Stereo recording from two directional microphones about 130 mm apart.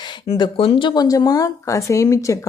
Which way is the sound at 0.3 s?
40° left (ahead or behind).